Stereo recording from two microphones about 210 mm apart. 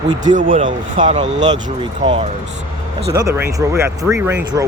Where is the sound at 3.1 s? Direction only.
15° right (ahead or behind).